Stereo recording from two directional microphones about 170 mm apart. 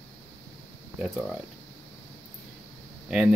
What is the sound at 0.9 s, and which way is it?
Speech, 5° right (ahead or behind).